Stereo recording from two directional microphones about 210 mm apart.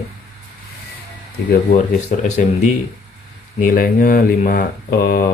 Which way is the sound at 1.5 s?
40° left (ahead or behind).